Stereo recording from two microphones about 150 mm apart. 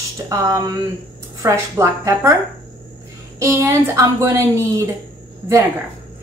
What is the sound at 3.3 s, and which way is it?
Speech, 20° right (ahead or behind).